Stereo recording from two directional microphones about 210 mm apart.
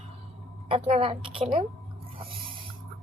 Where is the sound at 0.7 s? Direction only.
30° right (ahead or behind).